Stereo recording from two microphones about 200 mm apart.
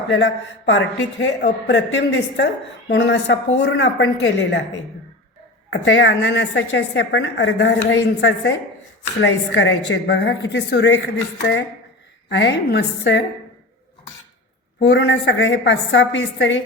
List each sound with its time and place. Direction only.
0.1 s a woman's voice: 65° left (ahead or behind)
5.8 s a woman's voice: 65° left (ahead or behind)
14.8 s a woman's voice: 65° left (ahead or behind)